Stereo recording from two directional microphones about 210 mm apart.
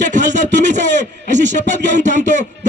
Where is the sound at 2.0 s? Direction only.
35° right (ahead or behind).